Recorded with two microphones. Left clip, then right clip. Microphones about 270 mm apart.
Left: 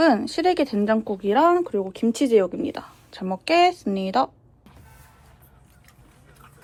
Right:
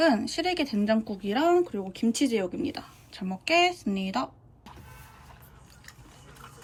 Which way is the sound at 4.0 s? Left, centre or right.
Centre.